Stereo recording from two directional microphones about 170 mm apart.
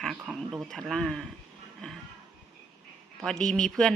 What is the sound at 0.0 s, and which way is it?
Speech, centre (ahead or behind).